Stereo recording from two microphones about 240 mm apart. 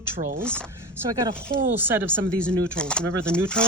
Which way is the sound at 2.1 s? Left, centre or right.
Centre.